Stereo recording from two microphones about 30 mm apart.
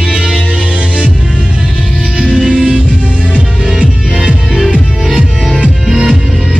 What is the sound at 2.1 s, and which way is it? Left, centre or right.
Music, right.